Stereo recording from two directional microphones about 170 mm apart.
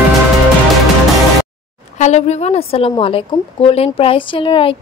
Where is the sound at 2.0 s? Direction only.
40° left (ahead or behind).